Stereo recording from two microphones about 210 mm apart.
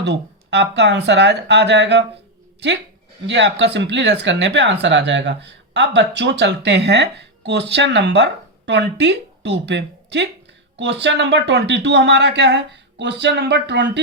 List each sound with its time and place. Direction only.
0.0 s speech: 55° right (ahead or behind)